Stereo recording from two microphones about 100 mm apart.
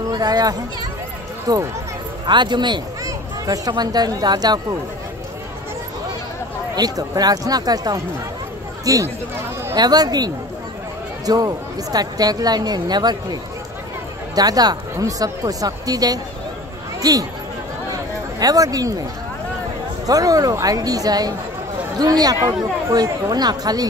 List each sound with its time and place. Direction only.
0.1 s a woman's voice: 40° right (ahead or behind)
3.0 s a woman's voice: 35° right (ahead or behind)
6.7 s a woman's voice: 40° right (ahead or behind)
18.4 s a woman's voice: 40° right (ahead or behind)
20.1 s a woman's voice: 35° right (ahead or behind)